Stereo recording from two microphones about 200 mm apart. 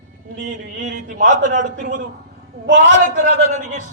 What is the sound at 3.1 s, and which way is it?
Speech, 40° right (ahead or behind).